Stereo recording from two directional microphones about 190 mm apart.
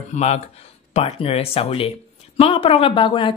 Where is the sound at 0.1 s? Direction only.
35° left (ahead or behind).